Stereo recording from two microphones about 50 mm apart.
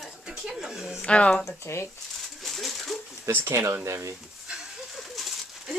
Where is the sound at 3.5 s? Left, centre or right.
Right.